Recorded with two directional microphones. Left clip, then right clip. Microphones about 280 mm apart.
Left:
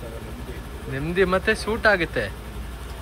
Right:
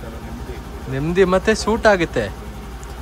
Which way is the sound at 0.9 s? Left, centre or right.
Centre.